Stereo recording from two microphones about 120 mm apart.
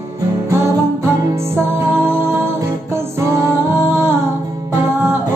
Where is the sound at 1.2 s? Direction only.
20° right (ahead or behind).